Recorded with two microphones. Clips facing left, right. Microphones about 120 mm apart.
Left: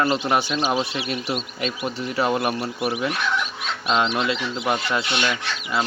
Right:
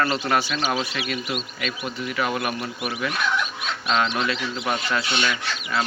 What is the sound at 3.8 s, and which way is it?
A man's voice, 20° left (ahead or behind).